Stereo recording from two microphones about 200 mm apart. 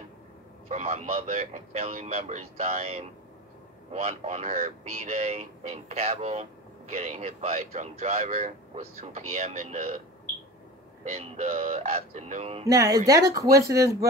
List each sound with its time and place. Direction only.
0.7 s speech: 35° right (ahead or behind)
11.1 s speech: 30° right (ahead or behind)
12.6 s speech: 15° right (ahead or behind)